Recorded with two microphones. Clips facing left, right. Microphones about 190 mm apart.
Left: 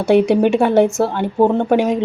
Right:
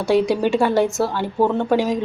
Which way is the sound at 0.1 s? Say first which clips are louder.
Left 5 dB; 20° left (ahead or behind).